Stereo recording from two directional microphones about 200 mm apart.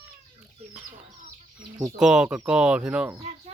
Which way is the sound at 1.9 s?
5° right (ahead or behind).